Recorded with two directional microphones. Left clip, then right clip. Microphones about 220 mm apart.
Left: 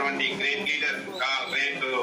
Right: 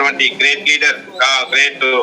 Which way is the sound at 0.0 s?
45° right (ahead or behind).